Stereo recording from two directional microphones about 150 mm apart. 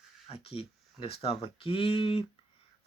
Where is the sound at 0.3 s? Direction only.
40° left (ahead or behind).